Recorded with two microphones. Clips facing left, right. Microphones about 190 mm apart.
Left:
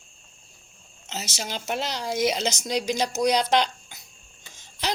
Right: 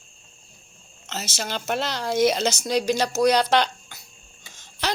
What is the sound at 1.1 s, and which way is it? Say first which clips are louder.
Speech: right 3 dB; 15° left (ahead or behind).